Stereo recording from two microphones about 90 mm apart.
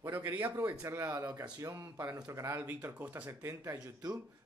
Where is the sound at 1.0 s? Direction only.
45° right (ahead or behind).